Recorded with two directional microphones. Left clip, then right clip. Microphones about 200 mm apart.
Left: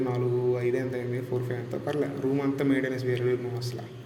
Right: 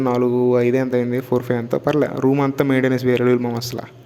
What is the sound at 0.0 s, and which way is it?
A man's voice, 50° right (ahead or behind).